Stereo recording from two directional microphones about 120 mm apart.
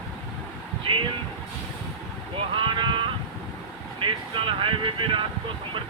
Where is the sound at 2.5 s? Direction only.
45° right (ahead or behind).